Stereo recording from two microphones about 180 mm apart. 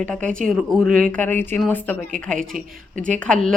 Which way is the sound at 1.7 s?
10° left (ahead or behind).